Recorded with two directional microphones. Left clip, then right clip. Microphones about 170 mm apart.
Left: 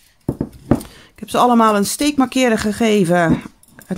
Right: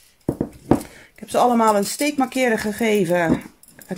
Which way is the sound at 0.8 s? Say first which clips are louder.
Left 4 dB; 30° left (ahead or behind).